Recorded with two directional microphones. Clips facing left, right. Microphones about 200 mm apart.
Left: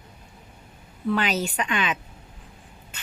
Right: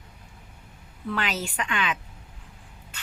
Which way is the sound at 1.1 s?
20° left (ahead or behind).